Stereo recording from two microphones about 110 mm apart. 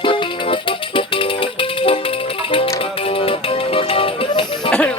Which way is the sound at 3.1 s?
60° left (ahead or behind).